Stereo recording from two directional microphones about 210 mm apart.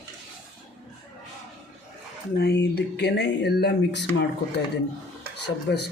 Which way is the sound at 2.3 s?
50° left (ahead or behind).